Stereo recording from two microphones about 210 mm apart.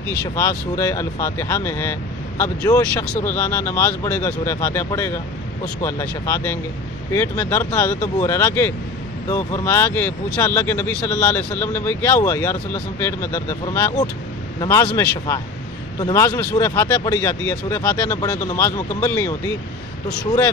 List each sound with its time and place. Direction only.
0.4 s speech: 15° left (ahead or behind)